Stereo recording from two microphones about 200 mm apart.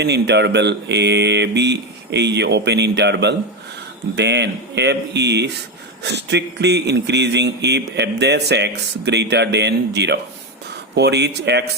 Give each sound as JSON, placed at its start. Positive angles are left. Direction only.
{"t": 0.0, "sound": "speech", "side_deg": -60}